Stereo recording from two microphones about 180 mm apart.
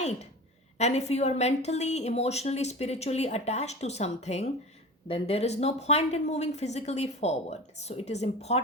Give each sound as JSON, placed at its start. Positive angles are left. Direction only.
{"t": 0.8, "sound": "a woman's voice", "side_deg": 35}